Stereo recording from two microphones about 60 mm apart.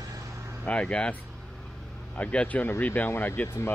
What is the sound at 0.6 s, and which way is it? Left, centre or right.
Speech, left.